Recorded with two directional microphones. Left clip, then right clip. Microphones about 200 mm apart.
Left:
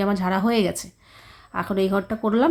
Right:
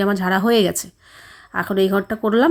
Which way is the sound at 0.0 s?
20° right (ahead or behind).